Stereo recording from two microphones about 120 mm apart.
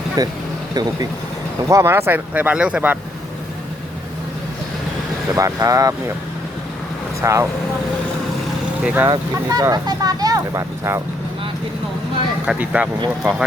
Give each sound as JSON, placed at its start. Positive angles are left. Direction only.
{"t": 0.2, "sound": "speech", "side_deg": -30}
{"t": 1.6, "sound": "speech", "side_deg": -25}
{"t": 5.3, "sound": "speech", "side_deg": -30}
{"t": 7.2, "sound": "speech", "side_deg": -25}
{"t": 8.8, "sound": "speech", "side_deg": -10}
{"t": 9.0, "sound": "speech", "side_deg": -30}
{"t": 12.5, "sound": "speech", "side_deg": -10}